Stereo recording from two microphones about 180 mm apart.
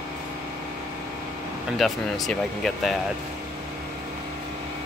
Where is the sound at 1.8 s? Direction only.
Centre (ahead or behind).